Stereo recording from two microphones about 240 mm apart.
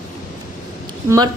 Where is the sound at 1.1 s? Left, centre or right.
Centre.